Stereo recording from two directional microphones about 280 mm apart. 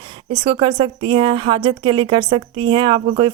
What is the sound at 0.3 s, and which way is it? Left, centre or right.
Speech, centre.